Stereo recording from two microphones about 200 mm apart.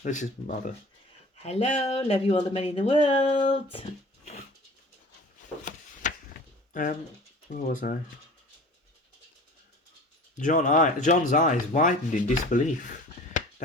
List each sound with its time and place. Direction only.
0.0 s speech: 40° left (ahead or behind)
5.6 s a sound: 40° left (ahead or behind)
7.5 s speech: 40° left (ahead or behind)
10.3 s speech: 40° left (ahead or behind)